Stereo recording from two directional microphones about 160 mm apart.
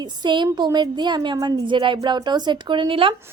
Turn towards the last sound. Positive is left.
turn(degrees=-35)  # may be behind; listen again after turning